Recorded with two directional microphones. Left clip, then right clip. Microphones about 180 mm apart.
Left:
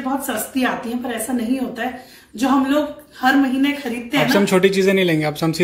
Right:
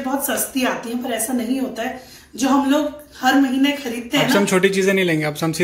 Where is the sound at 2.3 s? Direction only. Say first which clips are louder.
Even; 15° left (ahead or behind).